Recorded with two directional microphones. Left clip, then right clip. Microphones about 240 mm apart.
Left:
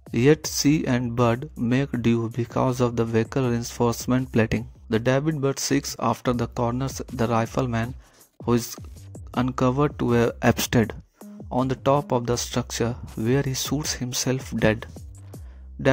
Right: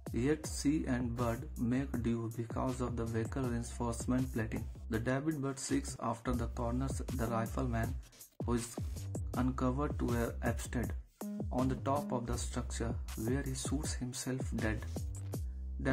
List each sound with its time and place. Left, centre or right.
0.1 s speech: left
9.3 s speech: left
13.0 s speech: centre
13.3 s speech: left